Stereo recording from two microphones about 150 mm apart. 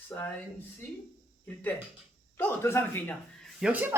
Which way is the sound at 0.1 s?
10° left (ahead or behind).